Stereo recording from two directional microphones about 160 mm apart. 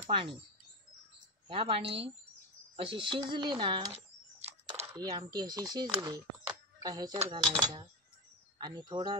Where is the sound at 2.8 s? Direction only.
35° right (ahead or behind).